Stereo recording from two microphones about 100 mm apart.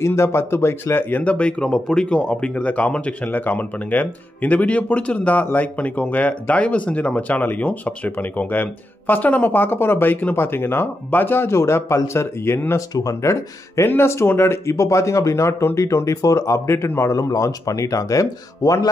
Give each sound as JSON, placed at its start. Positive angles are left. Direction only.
{"t": 0.0, "sound": "speech", "side_deg": 25}